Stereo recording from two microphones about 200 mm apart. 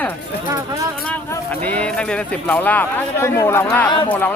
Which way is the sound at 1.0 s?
10° left (ahead or behind).